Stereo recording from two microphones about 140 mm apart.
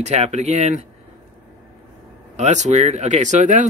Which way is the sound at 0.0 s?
50° right (ahead or behind).